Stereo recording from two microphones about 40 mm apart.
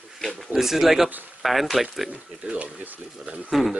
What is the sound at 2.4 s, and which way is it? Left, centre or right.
Speech, right.